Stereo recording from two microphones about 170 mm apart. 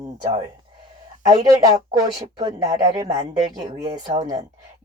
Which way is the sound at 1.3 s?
20° right (ahead or behind).